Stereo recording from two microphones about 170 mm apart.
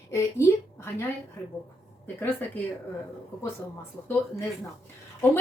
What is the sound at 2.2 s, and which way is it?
Speech, 10° left (ahead or behind).